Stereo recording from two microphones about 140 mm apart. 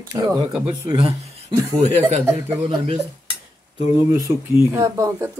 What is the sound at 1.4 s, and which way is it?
Speech, 50° right (ahead or behind).